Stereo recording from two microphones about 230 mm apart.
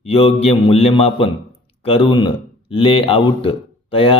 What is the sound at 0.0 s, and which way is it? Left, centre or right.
Speech, left.